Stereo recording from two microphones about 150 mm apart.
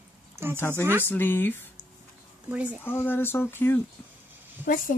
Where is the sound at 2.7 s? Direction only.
15° left (ahead or behind).